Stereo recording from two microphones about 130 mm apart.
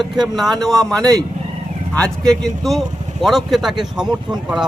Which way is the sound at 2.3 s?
Centre (ahead or behind).